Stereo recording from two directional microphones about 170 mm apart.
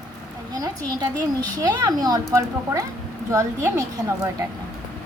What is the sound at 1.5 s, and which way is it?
A woman's voice, 25° right (ahead or behind).